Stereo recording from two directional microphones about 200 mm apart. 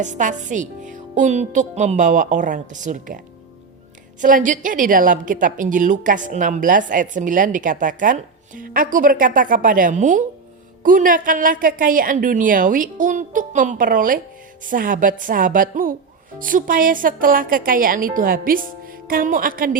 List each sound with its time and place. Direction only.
0.0 s a woman's voice: 40° right (ahead or behind)
4.2 s a woman's voice: 40° right (ahead or behind)